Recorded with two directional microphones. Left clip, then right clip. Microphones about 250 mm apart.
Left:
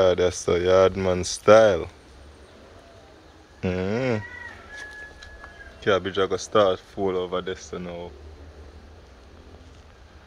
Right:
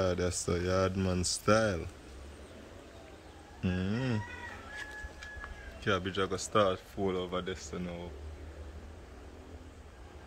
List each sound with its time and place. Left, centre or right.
0.0 s speech: centre
3.6 s speech: centre
5.9 s speech: centre